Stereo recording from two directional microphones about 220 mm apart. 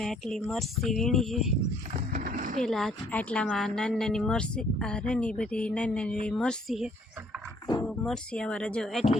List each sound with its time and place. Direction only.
0.0 s speech: centre (ahead or behind)
2.1 s a sound: 40° right (ahead or behind)
2.6 s speech: centre (ahead or behind)